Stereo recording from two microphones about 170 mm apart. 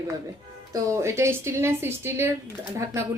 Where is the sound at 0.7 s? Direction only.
15° right (ahead or behind).